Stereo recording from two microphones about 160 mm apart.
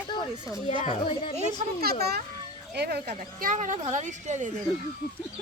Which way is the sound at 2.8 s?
90° right.